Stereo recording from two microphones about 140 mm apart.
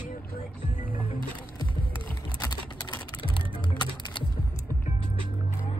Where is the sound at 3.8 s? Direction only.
35° left (ahead or behind).